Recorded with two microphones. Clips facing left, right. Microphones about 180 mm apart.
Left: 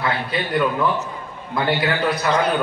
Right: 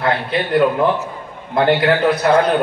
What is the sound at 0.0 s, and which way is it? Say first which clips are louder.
A man's voice: right 5 dB; 60° right (ahead or behind).